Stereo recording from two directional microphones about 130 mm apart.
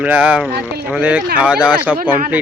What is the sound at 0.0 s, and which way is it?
Speech, 15° right (ahead or behind).